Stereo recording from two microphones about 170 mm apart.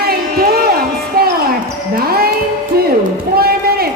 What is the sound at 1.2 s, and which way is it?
Basketball bounce, 65° right (ahead or behind).